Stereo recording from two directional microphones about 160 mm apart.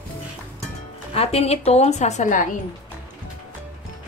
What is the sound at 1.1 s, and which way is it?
A woman's voice, 40° left (ahead or behind).